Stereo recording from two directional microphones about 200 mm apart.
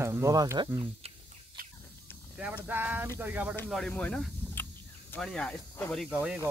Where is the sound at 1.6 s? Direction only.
45° right (ahead or behind).